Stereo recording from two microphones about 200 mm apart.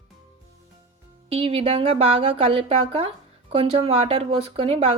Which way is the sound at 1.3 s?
30° right (ahead or behind).